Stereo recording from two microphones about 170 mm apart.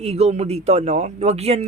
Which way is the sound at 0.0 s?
40° right (ahead or behind).